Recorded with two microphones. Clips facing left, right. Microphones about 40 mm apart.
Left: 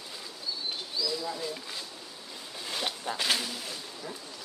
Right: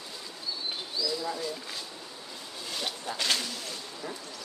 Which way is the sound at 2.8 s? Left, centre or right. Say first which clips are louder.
Left 1 dB; centre.